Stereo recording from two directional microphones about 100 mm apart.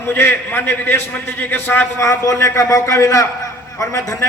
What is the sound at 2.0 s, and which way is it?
A man's voice, 30° left (ahead or behind).